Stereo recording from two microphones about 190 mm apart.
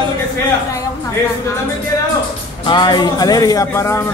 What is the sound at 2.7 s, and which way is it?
Speech, 25° left (ahead or behind).